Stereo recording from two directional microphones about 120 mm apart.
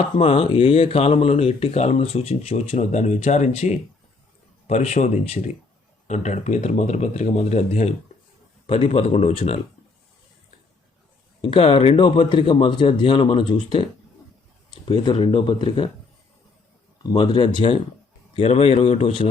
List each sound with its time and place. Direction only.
0.2 s speech: 50° left (ahead or behind)
8.6 s speech: 50° left (ahead or behind)
11.4 s speech: 45° left (ahead or behind)
14.8 s speech: 40° left (ahead or behind)
17.0 s speech: 35° left (ahead or behind)
18.3 s speech: 60° left (ahead or behind)